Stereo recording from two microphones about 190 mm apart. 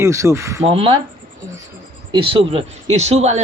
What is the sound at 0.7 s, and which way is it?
Speech, 30° right (ahead or behind).